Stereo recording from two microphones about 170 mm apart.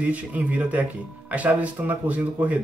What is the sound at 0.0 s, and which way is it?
Speech, 10° right (ahead or behind).